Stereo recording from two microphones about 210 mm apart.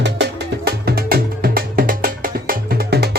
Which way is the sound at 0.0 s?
50° right (ahead or behind).